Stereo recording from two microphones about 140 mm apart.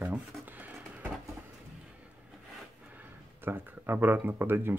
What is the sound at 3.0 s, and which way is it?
Speech, 15° right (ahead or behind).